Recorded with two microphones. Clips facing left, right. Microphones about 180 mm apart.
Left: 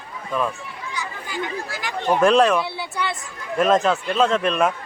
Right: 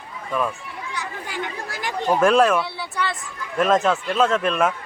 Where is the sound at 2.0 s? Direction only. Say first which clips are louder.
Left 1 dB; 5° right (ahead or behind).